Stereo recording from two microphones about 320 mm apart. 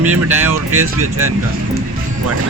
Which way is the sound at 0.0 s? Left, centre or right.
Centre.